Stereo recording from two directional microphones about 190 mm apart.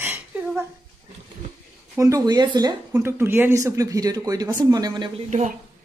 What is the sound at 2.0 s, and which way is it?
Speech, 20° right (ahead or behind).